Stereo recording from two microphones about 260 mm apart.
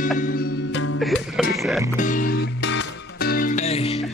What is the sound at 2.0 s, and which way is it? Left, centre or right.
Music, left.